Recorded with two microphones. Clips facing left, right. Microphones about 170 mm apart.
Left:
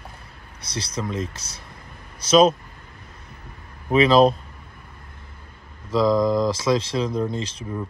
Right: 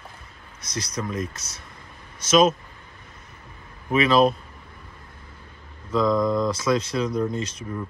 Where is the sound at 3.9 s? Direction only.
35° left (ahead or behind).